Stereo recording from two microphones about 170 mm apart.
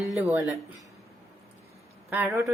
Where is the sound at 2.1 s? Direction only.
15° right (ahead or behind).